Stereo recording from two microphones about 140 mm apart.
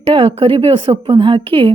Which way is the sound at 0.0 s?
40° right (ahead or behind).